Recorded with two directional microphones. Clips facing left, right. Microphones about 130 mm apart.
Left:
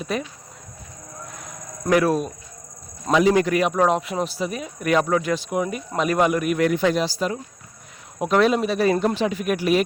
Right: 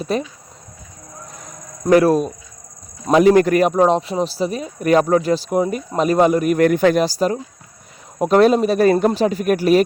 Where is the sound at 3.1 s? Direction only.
50° right (ahead or behind).